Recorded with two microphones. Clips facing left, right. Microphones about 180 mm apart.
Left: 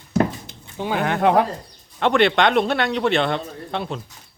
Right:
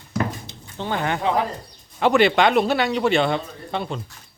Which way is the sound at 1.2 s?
60° left (ahead or behind).